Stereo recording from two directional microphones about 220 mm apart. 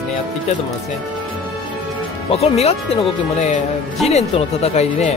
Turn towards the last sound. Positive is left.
turn(degrees=30)  # may be behind; listen again after turning